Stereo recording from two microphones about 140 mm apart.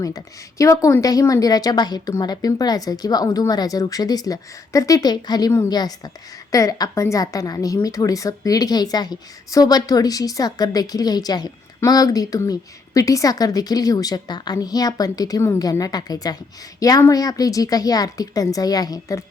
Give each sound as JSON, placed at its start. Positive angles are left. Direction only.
{"t": 0.6, "sound": "a woman's voice", "side_deg": 25}